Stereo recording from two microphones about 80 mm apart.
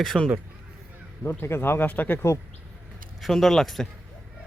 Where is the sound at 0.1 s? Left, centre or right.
Centre.